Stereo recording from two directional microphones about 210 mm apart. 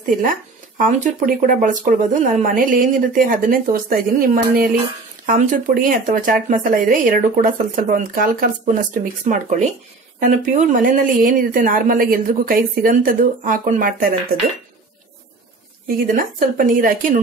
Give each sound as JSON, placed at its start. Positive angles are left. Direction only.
{"t": 0.7, "sound": "speech", "side_deg": -35}
{"t": 16.2, "sound": "speech", "side_deg": -40}